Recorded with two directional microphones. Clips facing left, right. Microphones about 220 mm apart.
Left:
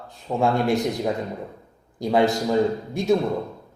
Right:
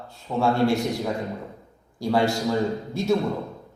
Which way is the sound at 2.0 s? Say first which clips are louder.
Left 2 dB; 20° left (ahead or behind).